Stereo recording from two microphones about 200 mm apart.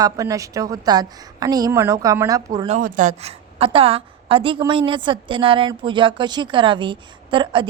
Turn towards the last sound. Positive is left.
turn(degrees=-25)  # may be behind; listen again after turning